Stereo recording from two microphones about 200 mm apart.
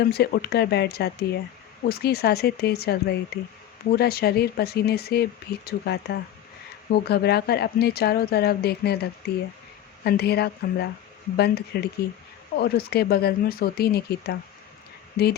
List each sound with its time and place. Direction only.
0.0 s speech: 55° left (ahead or behind)